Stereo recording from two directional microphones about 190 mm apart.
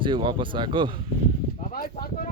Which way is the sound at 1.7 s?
50° left (ahead or behind).